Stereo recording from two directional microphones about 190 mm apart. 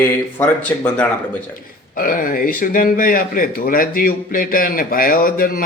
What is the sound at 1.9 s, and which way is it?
Speech, 45° left (ahead or behind).